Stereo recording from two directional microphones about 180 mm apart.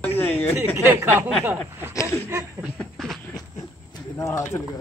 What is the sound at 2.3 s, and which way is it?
Speech, 15° right (ahead or behind).